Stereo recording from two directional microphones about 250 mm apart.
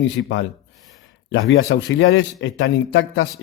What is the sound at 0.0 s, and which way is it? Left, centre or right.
Speech, left.